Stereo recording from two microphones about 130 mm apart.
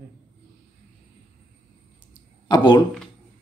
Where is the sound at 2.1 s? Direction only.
35° left (ahead or behind).